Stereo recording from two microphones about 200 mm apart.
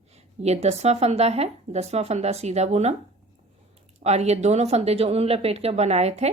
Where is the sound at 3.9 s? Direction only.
35° right (ahead or behind).